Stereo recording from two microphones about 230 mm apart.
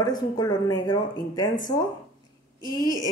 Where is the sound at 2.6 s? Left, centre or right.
Centre.